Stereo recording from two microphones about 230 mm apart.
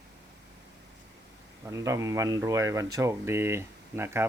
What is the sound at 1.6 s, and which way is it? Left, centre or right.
Speech, centre.